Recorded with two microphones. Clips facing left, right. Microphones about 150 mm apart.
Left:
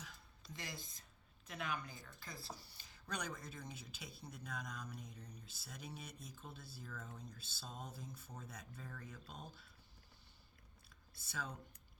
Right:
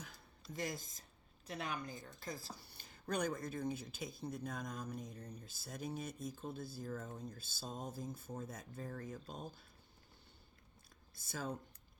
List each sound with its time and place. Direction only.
0.5 s speech: 45° right (ahead or behind)
1.5 s speech: 35° right (ahead or behind)
11.1 s speech: 45° right (ahead or behind)